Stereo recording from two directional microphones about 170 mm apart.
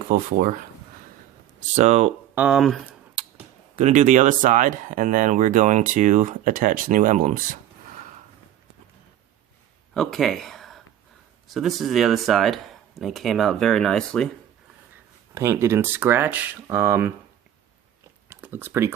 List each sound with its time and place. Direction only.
0.1 s speech: 55° right (ahead or behind)
1.7 s speech: 40° right (ahead or behind)
2.3 s speech: 5° right (ahead or behind)
3.8 s speech: 45° right (ahead or behind)
9.9 s speech: centre (ahead or behind)
15.4 s speech: 15° right (ahead or behind)
18.3 s speech: 15° right (ahead or behind)